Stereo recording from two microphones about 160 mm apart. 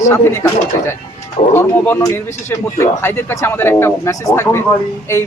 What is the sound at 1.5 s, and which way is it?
Speech, 15° left (ahead or behind).